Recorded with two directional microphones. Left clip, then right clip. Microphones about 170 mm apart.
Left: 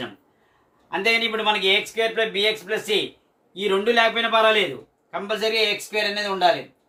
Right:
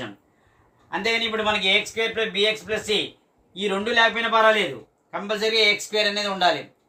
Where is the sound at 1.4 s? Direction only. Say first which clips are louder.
Left 1 dB; 20° right (ahead or behind).